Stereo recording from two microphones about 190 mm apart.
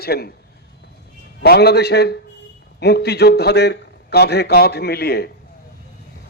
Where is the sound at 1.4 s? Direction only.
55° left (ahead or behind).